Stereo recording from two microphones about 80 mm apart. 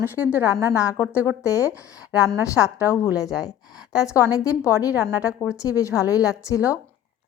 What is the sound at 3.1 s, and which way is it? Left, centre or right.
A woman's voice, left.